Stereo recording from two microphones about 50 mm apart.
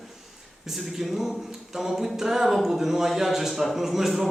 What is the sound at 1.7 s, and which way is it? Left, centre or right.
A man's voice, centre.